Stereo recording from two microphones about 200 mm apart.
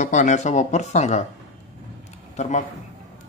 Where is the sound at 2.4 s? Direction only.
35° left (ahead or behind).